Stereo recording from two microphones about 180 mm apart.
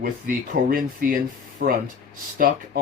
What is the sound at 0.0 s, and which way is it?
Speech, 50° right (ahead or behind).